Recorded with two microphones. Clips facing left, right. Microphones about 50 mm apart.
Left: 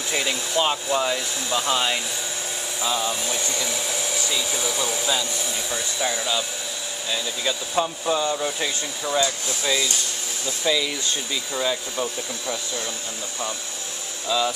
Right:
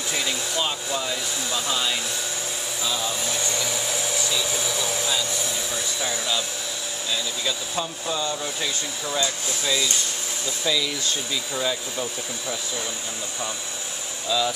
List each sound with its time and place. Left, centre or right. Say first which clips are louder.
0.1 s speech: left 4 dB; centre
3.0 s speech: left 1 dB; centre
3.6 s hair dryer: even; centre
4.2 s hair dryer: even; centre
4.5 s speech: left 1 dB; centre
14.3 s speech: left 1 dB; centre